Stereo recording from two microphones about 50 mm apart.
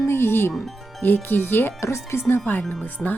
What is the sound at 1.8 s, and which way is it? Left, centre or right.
Speech, left.